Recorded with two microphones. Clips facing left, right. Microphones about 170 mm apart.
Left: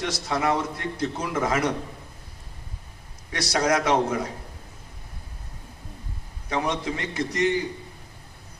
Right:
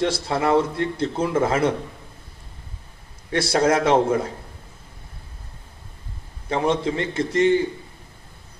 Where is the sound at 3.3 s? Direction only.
30° right (ahead or behind).